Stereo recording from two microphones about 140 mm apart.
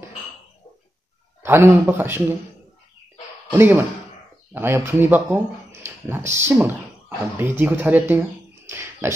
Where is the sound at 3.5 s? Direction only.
15° right (ahead or behind).